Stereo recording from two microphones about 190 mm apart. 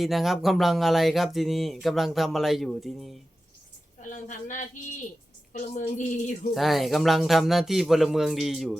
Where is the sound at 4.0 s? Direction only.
40° left (ahead or behind).